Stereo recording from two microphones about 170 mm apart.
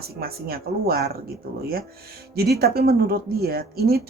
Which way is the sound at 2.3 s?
70° right (ahead or behind).